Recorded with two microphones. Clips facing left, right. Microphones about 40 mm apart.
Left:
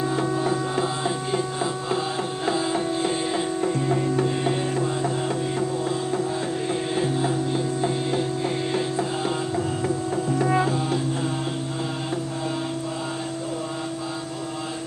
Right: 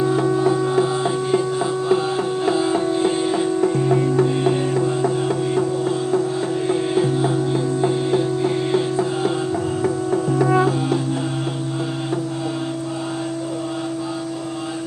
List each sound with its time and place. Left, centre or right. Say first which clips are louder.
0.8 s music: right 6 dB; right
2.5 s music: right 4 dB; right
4.2 s music: right 5 dB; right
8.7 s music: right 5 dB; right